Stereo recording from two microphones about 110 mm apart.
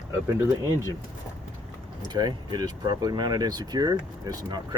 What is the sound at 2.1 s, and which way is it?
Speech, 40° right (ahead or behind).